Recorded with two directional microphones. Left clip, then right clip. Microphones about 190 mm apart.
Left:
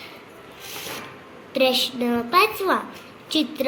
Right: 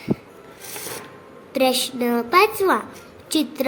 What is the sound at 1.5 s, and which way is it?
A woman's voice, 35° right (ahead or behind).